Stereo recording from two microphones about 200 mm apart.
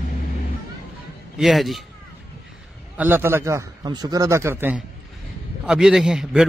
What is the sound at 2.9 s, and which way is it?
A man's voice, 10° right (ahead or behind).